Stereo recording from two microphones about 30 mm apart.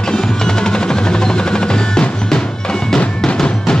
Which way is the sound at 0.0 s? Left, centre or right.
Left.